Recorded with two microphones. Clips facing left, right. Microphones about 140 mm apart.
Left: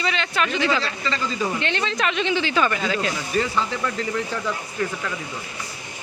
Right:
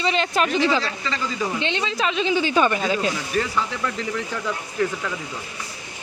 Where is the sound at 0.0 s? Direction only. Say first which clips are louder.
Right 3 dB; 35° right (ahead or behind).